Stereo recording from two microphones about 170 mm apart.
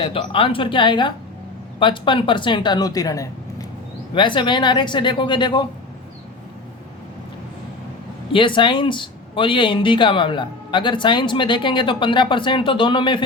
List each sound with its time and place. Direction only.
0.0 s speech: 30° left (ahead or behind)
8.3 s speech: 30° left (ahead or behind)